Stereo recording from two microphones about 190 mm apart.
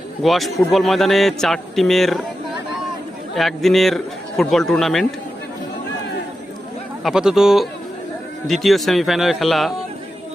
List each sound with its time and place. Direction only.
0.2 s a man's voice: centre (ahead or behind)
3.3 s a man's voice: centre (ahead or behind)
7.0 s a man's voice: 5° right (ahead or behind)